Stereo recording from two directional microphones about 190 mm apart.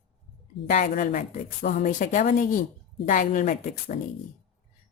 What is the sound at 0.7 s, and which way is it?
A woman's voice, 45° left (ahead or behind).